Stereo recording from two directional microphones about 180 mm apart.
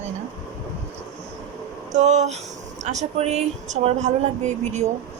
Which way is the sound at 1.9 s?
40° right (ahead or behind).